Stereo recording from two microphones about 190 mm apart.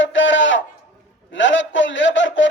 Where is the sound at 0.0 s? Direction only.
80° left.